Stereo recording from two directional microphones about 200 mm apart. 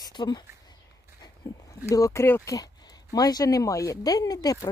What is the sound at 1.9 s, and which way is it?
Speech, 15° left (ahead or behind).